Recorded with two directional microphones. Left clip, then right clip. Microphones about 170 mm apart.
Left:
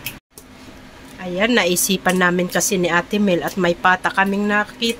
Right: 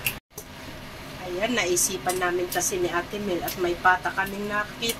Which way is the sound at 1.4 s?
50° left (ahead or behind).